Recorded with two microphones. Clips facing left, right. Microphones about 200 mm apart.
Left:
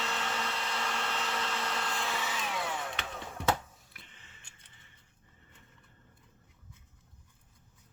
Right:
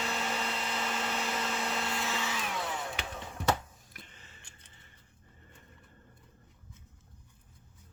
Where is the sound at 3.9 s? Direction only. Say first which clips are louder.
Right 4 dB; 40° right (ahead or behind).